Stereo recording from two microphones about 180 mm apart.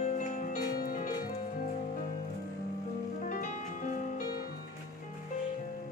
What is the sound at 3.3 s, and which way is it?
Music, 45° left (ahead or behind).